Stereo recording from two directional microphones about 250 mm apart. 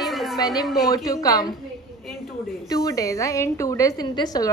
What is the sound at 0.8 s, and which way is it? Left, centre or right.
Speech, centre.